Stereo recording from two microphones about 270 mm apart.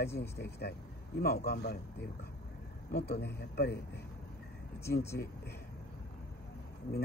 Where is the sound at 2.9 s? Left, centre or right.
Left.